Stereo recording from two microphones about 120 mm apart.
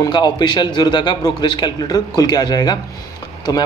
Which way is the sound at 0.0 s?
35° left (ahead or behind).